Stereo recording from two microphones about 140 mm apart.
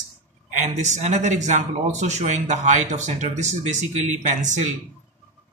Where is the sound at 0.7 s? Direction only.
55° right (ahead or behind).